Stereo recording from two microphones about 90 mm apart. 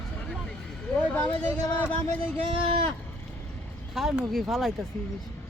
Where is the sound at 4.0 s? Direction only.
5° right (ahead or behind).